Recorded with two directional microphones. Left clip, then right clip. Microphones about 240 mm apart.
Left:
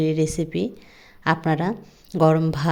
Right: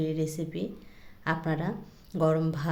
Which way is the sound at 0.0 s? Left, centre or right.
Left.